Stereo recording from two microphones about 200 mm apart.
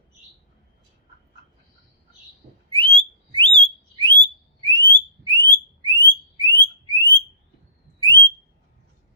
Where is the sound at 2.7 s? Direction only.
25° right (ahead or behind).